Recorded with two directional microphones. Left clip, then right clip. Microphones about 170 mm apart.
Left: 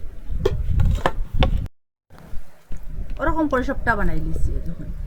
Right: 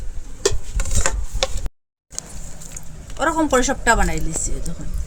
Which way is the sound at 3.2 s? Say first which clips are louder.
Right 4 dB; 40° right (ahead or behind).